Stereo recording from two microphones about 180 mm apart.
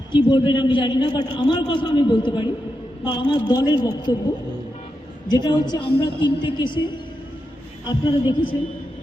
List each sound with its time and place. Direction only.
0.1 s a man's voice: 25° left (ahead or behind)
5.3 s a man's voice: 25° left (ahead or behind)